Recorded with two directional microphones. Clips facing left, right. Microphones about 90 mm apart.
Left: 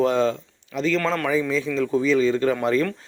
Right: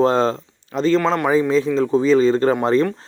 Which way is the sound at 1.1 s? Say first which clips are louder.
Right 5 dB; 25° right (ahead or behind).